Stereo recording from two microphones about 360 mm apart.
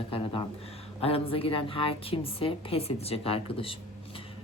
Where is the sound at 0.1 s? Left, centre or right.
Centre.